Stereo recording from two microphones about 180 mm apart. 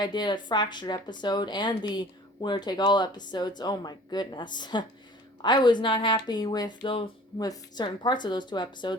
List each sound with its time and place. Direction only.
0.0 s a woman's voice: 25° left (ahead or behind)